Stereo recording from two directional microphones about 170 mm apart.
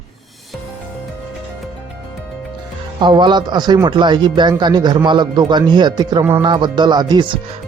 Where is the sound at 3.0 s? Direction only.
25° right (ahead or behind).